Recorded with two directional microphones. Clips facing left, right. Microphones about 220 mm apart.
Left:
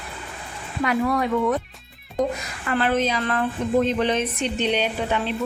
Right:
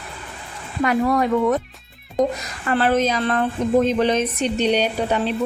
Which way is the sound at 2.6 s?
40° right (ahead or behind).